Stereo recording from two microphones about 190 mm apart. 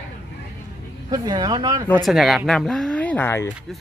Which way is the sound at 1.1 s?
20° right (ahead or behind).